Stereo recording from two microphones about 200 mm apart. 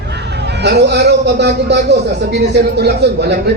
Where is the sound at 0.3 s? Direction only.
55° right (ahead or behind).